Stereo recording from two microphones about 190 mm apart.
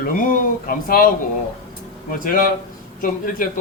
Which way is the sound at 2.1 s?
45° left (ahead or behind).